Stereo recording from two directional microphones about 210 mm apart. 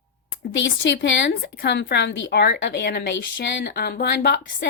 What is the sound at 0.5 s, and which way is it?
A woman's voice, 60° left (ahead or behind).